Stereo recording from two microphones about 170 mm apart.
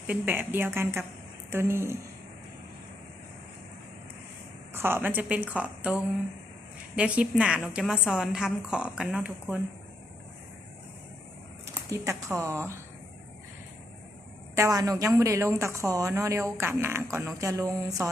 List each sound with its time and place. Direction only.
0.1 s a woman's voice: 10° right (ahead or behind)
4.7 s a woman's voice: 15° right (ahead or behind)
11.9 s a woman's voice: 15° right (ahead or behind)
14.5 s a woman's voice: 20° right (ahead or behind)